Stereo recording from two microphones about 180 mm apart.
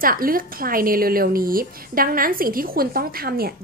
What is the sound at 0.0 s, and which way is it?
A woman's voice, 50° right (ahead or behind).